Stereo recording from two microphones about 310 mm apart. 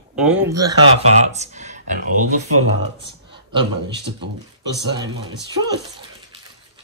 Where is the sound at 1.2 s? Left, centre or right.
Right.